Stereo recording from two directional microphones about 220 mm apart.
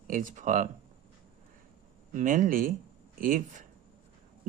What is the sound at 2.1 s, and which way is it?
Speech, 35° right (ahead or behind).